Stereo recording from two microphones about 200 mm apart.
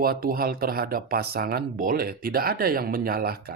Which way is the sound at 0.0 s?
50° right (ahead or behind).